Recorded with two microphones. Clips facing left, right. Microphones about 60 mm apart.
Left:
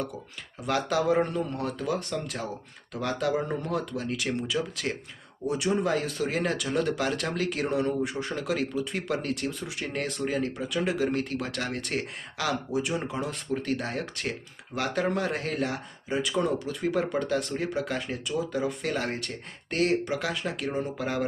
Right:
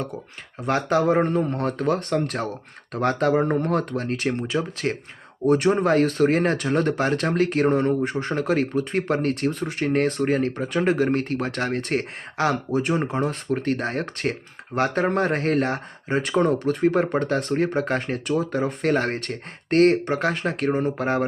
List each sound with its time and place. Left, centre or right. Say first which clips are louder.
0.6 s speech: right 5 dB; right
5.5 s speech: right 8 dB; right